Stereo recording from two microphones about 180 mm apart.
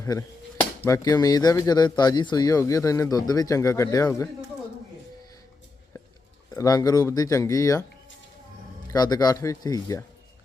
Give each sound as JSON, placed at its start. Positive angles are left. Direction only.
{"t": 0.0, "sound": "speech", "side_deg": 15}
{"t": 6.5, "sound": "speech", "side_deg": 20}
{"t": 8.9, "sound": "speech", "side_deg": 20}